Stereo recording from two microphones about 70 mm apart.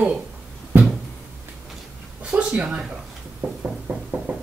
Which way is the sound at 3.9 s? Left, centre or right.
Right.